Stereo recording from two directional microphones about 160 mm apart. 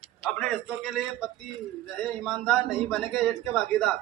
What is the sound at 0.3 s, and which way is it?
A man's voice, centre (ahead or behind).